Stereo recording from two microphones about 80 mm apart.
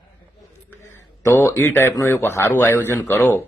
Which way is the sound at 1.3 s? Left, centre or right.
Left.